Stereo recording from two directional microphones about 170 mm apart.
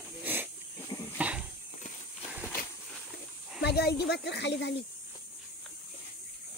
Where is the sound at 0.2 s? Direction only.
10° right (ahead or behind).